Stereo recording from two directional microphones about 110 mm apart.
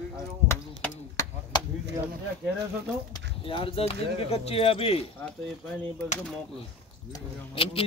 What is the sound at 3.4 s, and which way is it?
Speech, 55° left (ahead or behind).